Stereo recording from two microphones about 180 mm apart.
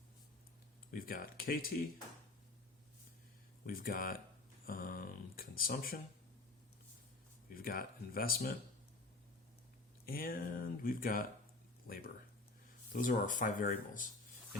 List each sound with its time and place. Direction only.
0.9 s speech: 50° left (ahead or behind)
3.7 s speech: 50° left (ahead or behind)
4.6 s a sound: 55° left (ahead or behind)
7.5 s speech: 55° left (ahead or behind)
10.1 s speech: 55° left (ahead or behind)